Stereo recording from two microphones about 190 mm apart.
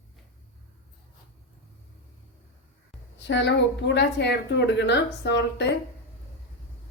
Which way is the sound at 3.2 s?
70° left (ahead or behind).